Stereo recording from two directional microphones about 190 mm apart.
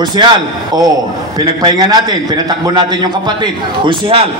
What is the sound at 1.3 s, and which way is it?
A man's voice, 20° right (ahead or behind).